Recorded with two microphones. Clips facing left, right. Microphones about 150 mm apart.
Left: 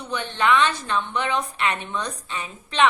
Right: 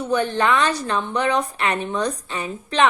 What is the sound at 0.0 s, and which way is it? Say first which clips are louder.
A woman's voice: right 5 dB; 45° right (ahead or behind).